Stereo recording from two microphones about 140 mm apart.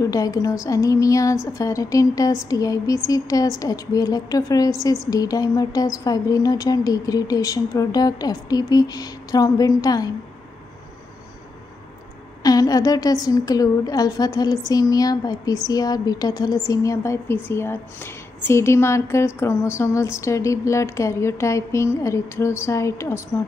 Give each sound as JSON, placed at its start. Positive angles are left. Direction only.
{"t": 0.0, "sound": "a woman's voice", "side_deg": 25}
{"t": 12.4, "sound": "a woman's voice", "side_deg": 25}